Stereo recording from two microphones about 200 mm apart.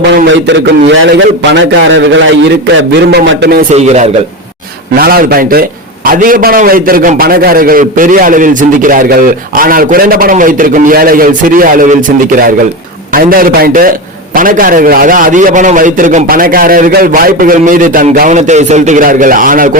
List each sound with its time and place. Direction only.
0.3 s a man's voice: 65° right (ahead or behind)
3.1 s a man's voice: 55° right (ahead or behind)
3.7 s a man's voice: 35° right (ahead or behind)
4.9 s a man's voice: 50° right (ahead or behind)